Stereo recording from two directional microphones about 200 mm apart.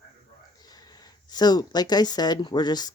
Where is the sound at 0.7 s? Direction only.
20° left (ahead or behind).